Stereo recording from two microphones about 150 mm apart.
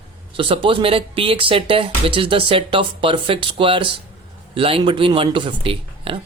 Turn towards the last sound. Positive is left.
turn(degrees=-35)  # may be behind; listen again after turning